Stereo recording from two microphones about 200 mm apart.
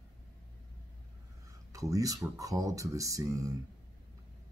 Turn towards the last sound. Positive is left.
turn(degrees=-15)  # may be behind; listen again after turning